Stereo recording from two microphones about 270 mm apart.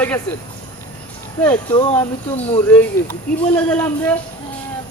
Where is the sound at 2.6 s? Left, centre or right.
Centre.